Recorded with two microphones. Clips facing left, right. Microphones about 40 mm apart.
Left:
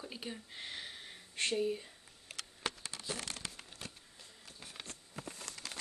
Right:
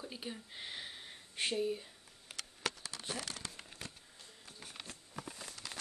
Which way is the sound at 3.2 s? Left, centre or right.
Left.